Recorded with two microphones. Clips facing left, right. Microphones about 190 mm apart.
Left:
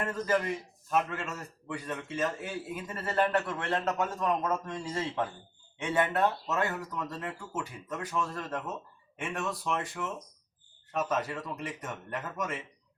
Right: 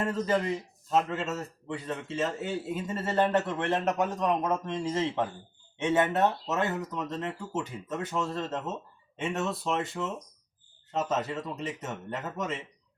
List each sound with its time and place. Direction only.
0.0 s speech: 25° right (ahead or behind)